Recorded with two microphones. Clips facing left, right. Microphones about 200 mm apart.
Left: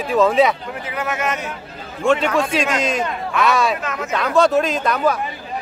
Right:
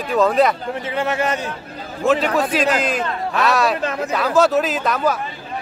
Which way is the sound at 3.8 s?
30° right (ahead or behind).